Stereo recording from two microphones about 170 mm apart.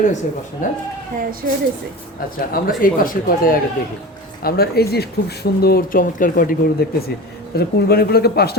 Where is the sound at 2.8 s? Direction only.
55° left (ahead or behind).